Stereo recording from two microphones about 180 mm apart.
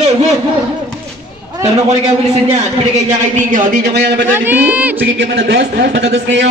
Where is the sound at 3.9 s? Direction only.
70° right (ahead or behind).